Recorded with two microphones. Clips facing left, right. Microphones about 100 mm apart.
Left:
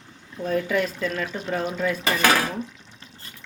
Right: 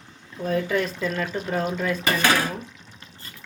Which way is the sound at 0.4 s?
Centre (ahead or behind).